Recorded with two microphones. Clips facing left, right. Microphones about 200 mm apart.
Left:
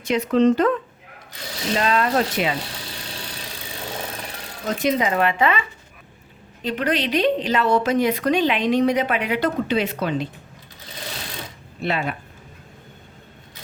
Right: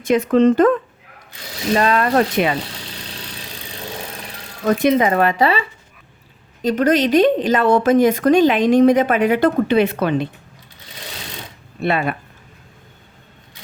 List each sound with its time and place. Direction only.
0.0 s a woman's voice: 50° right (ahead or behind)
4.6 s a woman's voice: 60° right (ahead or behind)
11.8 s speech: 55° right (ahead or behind)